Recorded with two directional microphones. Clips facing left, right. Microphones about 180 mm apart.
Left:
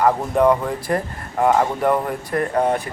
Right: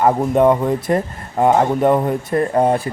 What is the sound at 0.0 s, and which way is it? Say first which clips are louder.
Speech: right 3 dB; 20° right (ahead or behind).